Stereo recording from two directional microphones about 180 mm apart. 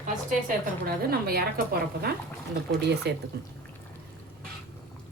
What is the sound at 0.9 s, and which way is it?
Speech, 60° right (ahead or behind).